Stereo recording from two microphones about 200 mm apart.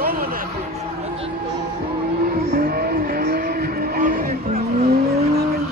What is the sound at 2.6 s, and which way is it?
Vehicle, 50° right (ahead or behind).